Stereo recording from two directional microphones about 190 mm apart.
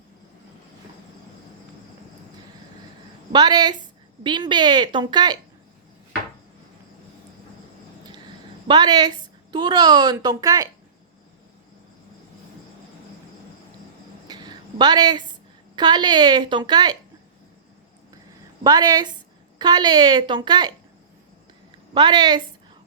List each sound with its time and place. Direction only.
3.3 s a woman's voice: 20° right (ahead or behind)
8.6 s a woman's voice: 20° right (ahead or behind)
14.3 s a sound: 20° right (ahead or behind)
15.7 s a woman's voice: 20° right (ahead or behind)
18.6 s a woman's voice: 20° right (ahead or behind)
21.9 s a woman's voice: 20° right (ahead or behind)